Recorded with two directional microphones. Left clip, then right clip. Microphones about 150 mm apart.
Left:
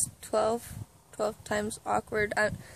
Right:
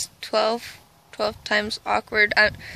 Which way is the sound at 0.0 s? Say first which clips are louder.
Right 6 dB; 5° left (ahead or behind).